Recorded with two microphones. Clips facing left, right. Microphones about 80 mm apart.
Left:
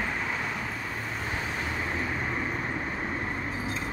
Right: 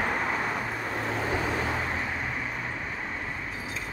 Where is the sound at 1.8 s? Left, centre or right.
Centre.